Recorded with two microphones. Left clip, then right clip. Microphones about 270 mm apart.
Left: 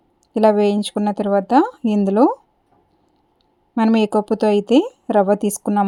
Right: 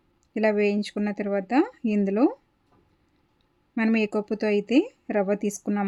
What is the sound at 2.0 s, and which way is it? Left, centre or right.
Speech, centre.